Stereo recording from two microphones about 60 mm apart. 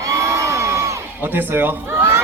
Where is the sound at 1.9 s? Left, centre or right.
Right.